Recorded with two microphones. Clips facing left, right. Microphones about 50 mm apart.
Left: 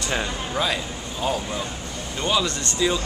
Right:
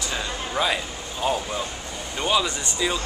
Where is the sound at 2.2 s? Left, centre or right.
Centre.